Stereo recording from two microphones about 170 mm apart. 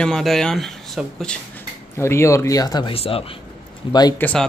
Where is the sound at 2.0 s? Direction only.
15° left (ahead or behind); by 3.2 s 35° left (ahead or behind).